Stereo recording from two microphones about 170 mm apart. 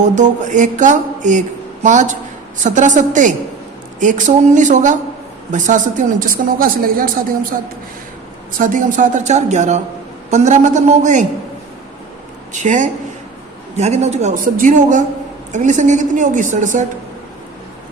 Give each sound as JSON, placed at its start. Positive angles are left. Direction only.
{"t": 0.0, "sound": "mantra", "side_deg": -45}
{"t": 8.5, "sound": "mantra", "side_deg": -50}
{"t": 12.5, "sound": "mantra", "side_deg": -45}